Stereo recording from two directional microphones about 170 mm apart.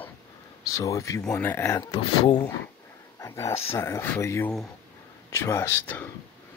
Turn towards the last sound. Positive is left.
turn(degrees=10)  # may be behind; listen again after turning